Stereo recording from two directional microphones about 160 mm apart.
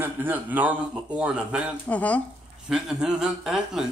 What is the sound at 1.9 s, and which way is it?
Speech, 10° left (ahead or behind).